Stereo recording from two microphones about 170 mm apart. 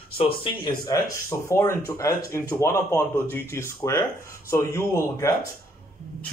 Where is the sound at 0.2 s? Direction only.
30° left (ahead or behind).